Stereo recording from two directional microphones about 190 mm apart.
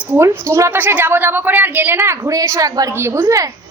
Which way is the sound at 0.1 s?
15° right (ahead or behind).